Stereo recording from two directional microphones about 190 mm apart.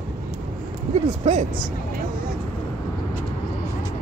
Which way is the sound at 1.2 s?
40° right (ahead or behind).